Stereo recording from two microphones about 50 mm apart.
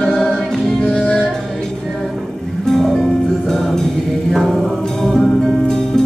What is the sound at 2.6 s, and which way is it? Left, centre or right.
Music, centre.